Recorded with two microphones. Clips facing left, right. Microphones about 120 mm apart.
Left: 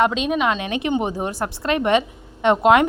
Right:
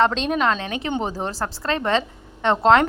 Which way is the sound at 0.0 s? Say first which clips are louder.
Even; 10° left (ahead or behind).